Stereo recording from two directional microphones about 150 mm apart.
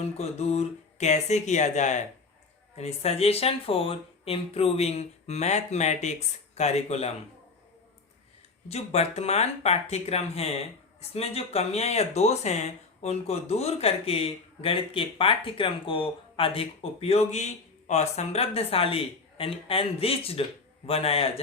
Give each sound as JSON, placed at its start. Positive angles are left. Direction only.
{"t": 0.0, "sound": "speech", "side_deg": 45}
{"t": 8.7, "sound": "speech", "side_deg": 45}